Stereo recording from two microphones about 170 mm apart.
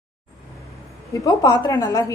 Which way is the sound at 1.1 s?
20° left (ahead or behind).